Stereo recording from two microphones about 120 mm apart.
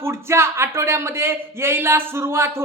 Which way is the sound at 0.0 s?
20° right (ahead or behind).